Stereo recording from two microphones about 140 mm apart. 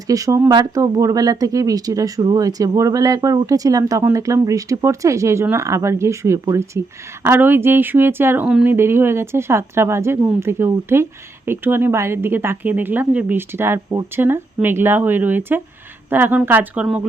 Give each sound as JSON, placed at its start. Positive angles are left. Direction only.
{"t": 0.1, "sound": "speech", "side_deg": -25}
{"t": 8.4, "sound": "speech", "side_deg": -5}
{"t": 8.7, "sound": "speech", "side_deg": -15}